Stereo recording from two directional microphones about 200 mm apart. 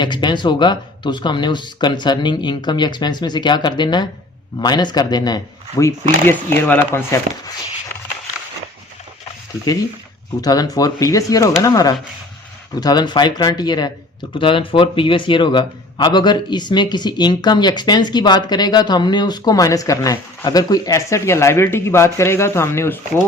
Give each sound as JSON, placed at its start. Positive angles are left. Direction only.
{"t": 0.0, "sound": "a man's voice", "side_deg": 20}
{"t": 10.4, "sound": "a man's voice", "side_deg": 20}